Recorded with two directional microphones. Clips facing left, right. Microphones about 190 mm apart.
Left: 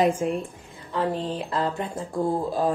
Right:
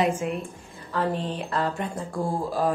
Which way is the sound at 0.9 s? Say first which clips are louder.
Left 1 dB; 20° left (ahead or behind).